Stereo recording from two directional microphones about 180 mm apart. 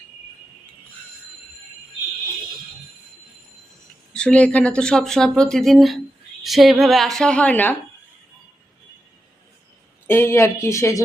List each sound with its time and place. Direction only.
4.1 s speech: 5° left (ahead or behind)
10.1 s speech: 15° left (ahead or behind)